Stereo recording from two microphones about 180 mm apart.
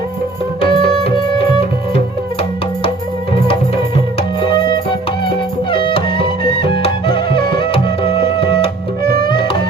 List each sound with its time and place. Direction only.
0.6 s music: 30° left (ahead or behind)
4.4 s music: 25° left (ahead or behind)